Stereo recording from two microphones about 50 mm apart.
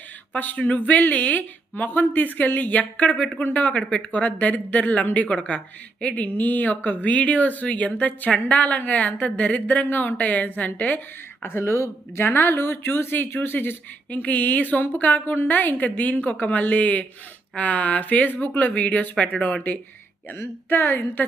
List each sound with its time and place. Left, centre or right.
0.3 s speech: left
11.4 s speech: left
11.7 s speech: left
12.2 s speech: left
14.1 s speech: left
20.3 s speech: left